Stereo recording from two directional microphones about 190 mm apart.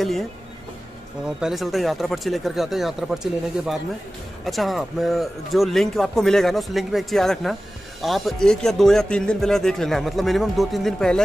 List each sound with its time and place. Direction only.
1.4 s a man's voice: centre (ahead or behind)